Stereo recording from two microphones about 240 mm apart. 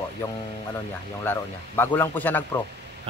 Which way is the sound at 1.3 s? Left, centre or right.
Centre.